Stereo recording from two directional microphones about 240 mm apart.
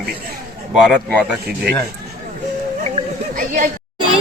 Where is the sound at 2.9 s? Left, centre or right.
Right.